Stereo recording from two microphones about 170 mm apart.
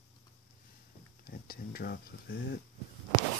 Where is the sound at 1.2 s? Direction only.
60° left (ahead or behind).